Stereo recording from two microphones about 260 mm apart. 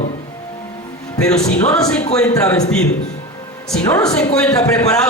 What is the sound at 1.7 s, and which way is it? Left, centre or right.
Speech, centre.